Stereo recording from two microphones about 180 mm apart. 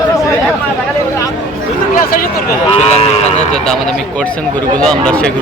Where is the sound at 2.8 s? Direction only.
35° left (ahead or behind).